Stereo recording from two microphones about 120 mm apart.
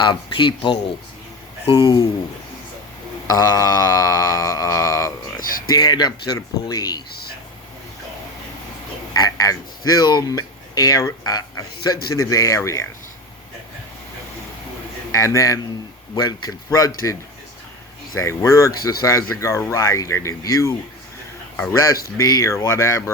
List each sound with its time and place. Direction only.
0.0 s speech: 40° left (ahead or behind)
1.7 s speech: 40° left (ahead or behind)
3.2 s speech: 30° left (ahead or behind)
9.1 s speech: 30° left (ahead or behind)
15.1 s speech: 30° left (ahead or behind)
18.3 s speech: 25° left (ahead or behind)
21.5 s a sound: 15° left (ahead or behind)
21.8 s speech: 30° left (ahead or behind)